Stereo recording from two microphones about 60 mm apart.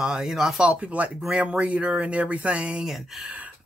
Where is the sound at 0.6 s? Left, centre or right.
Right.